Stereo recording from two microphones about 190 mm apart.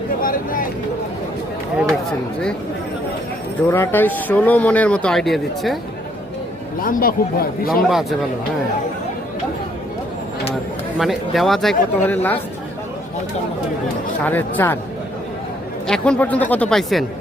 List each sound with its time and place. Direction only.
0.2 s speech: 45° left (ahead or behind)
3.7 s a man's voice: 10° left (ahead or behind)
6.8 s speech: 50° left (ahead or behind)
10.9 s speech: centre (ahead or behind)
14.3 s a man's voice: 10° left (ahead or behind)
15.9 s speech: 5° left (ahead or behind)